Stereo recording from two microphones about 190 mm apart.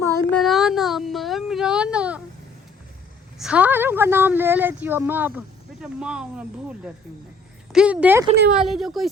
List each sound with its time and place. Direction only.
0.0 s child singing: 15° left (ahead or behind)
0.3 s a sound: centre (ahead or behind)
3.3 s a woman's voice: 5° right (ahead or behind)